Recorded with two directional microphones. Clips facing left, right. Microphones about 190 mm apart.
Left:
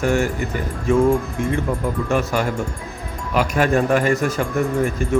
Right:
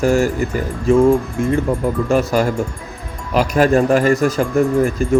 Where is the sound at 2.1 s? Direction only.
35° right (ahead or behind).